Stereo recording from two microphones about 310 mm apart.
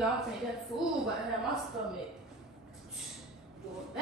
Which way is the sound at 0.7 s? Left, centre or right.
Centre.